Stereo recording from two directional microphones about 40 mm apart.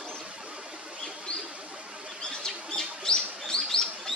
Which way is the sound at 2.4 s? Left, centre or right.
Centre.